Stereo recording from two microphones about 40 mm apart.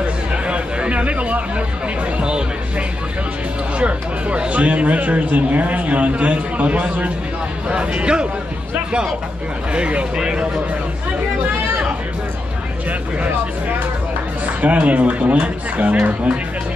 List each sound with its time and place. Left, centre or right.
0.0 s chatter: right
2.1 s speech: right
3.7 s speech: right
9.7 s speech: right
10.1 s speech: centre
14.6 s speech: right